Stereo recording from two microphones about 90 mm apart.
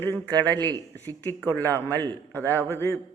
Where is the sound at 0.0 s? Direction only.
25° left (ahead or behind).